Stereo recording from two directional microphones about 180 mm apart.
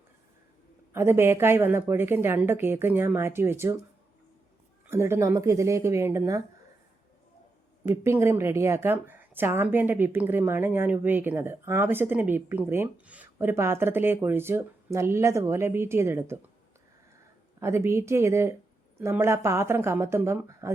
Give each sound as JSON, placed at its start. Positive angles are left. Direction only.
{"t": 0.9, "sound": "a woman's voice", "side_deg": -15}
{"t": 4.9, "sound": "a woman's voice", "side_deg": -15}
{"t": 8.0, "sound": "a woman's voice", "side_deg": -15}
{"t": 17.6, "sound": "a woman's voice", "side_deg": -15}